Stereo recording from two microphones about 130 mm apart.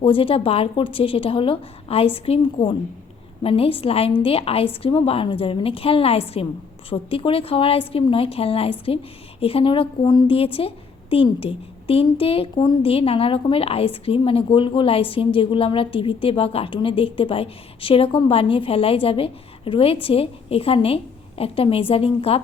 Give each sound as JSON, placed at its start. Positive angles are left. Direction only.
{"t": 0.0, "sound": "a woman's voice", "side_deg": 45}